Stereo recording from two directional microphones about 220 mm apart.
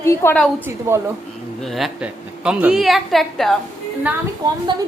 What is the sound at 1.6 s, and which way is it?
A woman's voice, centre (ahead or behind).